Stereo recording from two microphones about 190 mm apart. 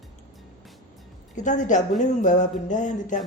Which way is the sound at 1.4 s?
40° left (ahead or behind).